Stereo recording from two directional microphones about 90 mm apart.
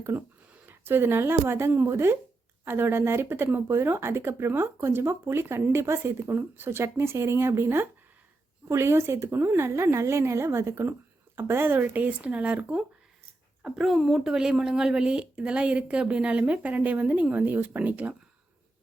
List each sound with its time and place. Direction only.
0.0 s a woman's voice: 25° right (ahead or behind)